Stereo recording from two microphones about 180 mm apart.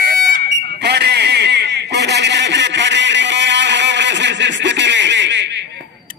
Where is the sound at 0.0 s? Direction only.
65° right (ahead or behind); by 5.7 s 80° right.